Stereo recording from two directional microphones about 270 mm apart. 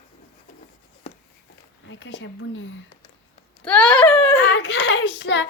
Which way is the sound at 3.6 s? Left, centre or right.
Centre.